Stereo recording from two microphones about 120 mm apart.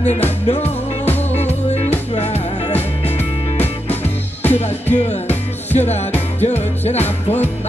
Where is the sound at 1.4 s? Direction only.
65° left (ahead or behind).